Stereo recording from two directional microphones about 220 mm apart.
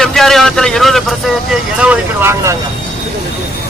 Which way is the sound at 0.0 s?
Centre (ahead or behind).